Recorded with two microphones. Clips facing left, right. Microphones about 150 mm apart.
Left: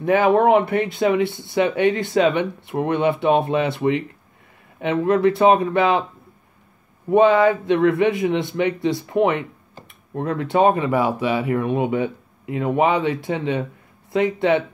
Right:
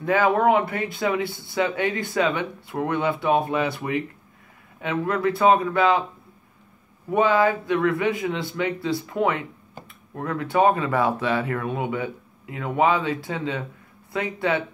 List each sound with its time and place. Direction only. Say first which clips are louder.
0.0 s speech: left 4 dB; 20° left (ahead or behind)
7.1 s speech: left 5 dB; 25° left (ahead or behind)